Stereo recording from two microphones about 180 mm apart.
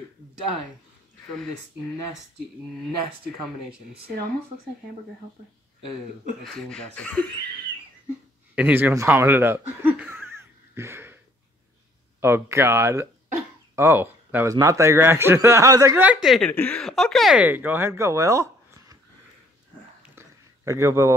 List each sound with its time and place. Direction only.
1.3 s speech: centre (ahead or behind)
6.4 s speech: centre (ahead or behind)
8.5 s speech: 10° right (ahead or behind)
12.2 s speech: 15° right (ahead or behind)
20.0 s a sound: 15° right (ahead or behind)